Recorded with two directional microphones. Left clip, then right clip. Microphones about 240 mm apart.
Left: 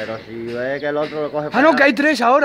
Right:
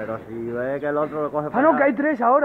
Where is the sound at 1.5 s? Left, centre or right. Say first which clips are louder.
Left 5 dB; left.